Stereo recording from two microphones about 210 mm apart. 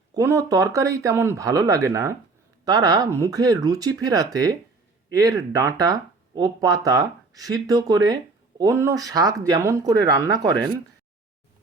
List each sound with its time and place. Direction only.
0.1 s speech: 15° right (ahead or behind)